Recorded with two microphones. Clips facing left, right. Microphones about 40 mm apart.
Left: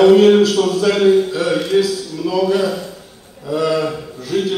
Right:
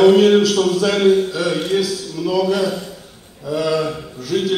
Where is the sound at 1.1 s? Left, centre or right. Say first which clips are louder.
Left 2 dB; left.